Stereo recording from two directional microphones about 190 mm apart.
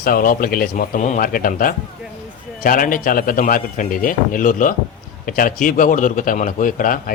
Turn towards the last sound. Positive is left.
turn(degrees=45)  # may be behind; listen again after turning